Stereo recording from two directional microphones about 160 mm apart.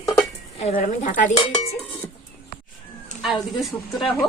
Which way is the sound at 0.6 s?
45° left (ahead or behind).